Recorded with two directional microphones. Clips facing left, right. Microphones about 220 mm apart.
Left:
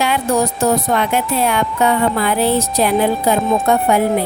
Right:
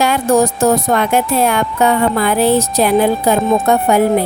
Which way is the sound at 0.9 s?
45° right (ahead or behind).